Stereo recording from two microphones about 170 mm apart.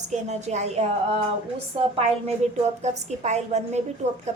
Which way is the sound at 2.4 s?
40° right (ahead or behind).